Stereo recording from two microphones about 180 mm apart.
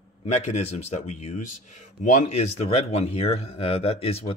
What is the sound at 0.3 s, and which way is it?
Speech, 35° left (ahead or behind).